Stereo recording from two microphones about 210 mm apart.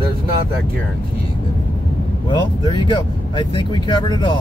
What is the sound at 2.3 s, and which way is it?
Speech, 20° left (ahead or behind).